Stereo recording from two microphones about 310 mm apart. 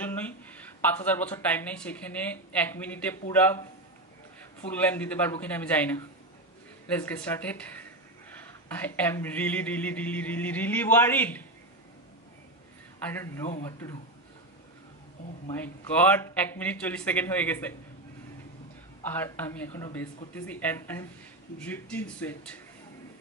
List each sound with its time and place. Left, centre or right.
0.0 s speech: centre
8.6 s speech: centre
13.1 s speech: centre
15.6 s speech: centre
19.0 s speech: centre